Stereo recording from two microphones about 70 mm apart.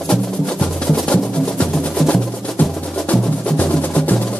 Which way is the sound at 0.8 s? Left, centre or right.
Centre.